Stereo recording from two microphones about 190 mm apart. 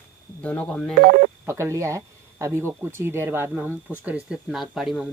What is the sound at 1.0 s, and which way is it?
Speech, 50° right (ahead or behind).